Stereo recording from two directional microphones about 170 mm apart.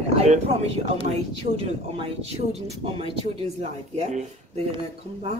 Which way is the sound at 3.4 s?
40° right (ahead or behind).